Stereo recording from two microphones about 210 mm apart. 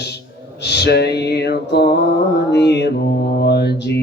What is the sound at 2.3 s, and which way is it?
Mantra, 55° left (ahead or behind).